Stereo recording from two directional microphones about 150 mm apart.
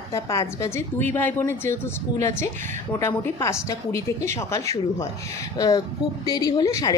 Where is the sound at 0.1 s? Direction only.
20° left (ahead or behind).